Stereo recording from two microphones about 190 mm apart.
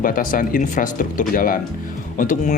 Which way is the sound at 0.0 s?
45° left (ahead or behind).